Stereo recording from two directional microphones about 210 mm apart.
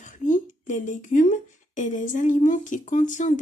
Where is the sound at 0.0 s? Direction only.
35° left (ahead or behind).